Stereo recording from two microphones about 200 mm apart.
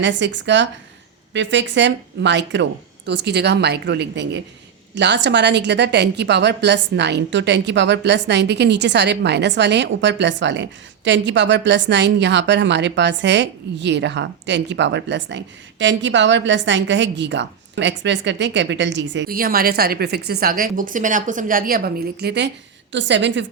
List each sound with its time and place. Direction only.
0.0 s a woman's voice: 65° right (ahead or behind)